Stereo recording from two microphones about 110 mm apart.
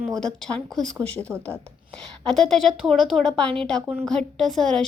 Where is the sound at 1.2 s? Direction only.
25° right (ahead or behind).